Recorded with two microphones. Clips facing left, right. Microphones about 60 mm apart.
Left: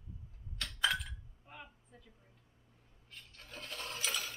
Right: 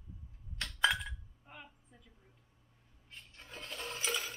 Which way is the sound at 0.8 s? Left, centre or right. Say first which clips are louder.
Right 3 dB; right.